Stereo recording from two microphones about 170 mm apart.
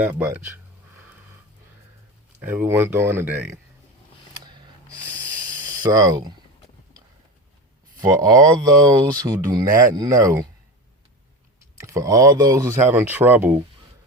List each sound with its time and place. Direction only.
0.0 s speech: 10° right (ahead or behind)
2.4 s speech: 10° right (ahead or behind)
4.4 s a sound: 25° right (ahead or behind)
5.8 s speech: 25° right (ahead or behind)
8.2 s speech: 20° right (ahead or behind)
11.8 s speech: 20° right (ahead or behind)